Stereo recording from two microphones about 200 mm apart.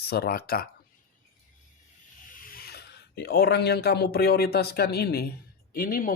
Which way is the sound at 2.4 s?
50° left (ahead or behind).